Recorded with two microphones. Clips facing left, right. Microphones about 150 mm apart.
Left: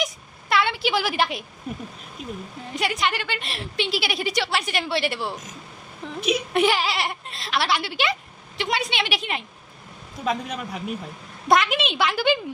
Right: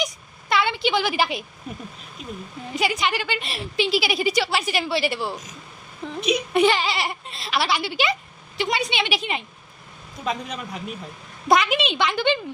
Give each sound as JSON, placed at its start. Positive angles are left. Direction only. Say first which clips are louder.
{"t": 0.0, "sound": "a sound", "louder": "even", "side_deg": 0}
{"t": 2.2, "sound": "speech", "louder": "left 1 dB", "side_deg": 55}
{"t": 2.6, "sound": "a woman's voice", "louder": "right 1 dB", "side_deg": 0}